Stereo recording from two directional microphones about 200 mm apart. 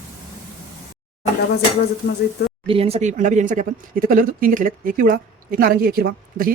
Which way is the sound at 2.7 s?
30° right (ahead or behind).